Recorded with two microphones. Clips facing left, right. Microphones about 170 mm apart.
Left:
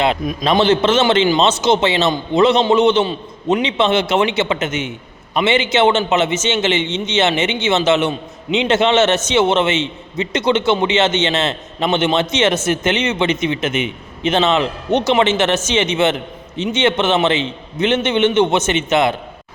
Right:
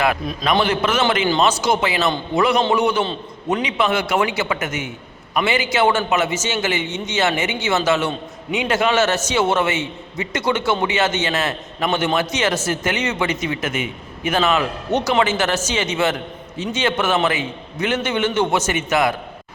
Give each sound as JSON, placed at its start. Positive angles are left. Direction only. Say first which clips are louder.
{"t": 0.6, "sound": "a man's voice", "louder": "left 8 dB", "side_deg": 25}